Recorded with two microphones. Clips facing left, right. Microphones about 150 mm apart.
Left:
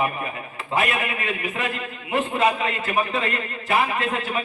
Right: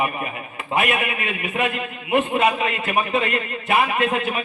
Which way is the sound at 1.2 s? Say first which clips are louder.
Right 3 dB; 30° left (ahead or behind).